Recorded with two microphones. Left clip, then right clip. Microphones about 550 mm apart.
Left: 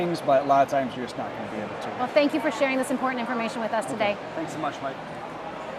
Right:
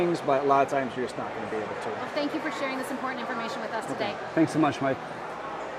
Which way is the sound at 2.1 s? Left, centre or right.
Left.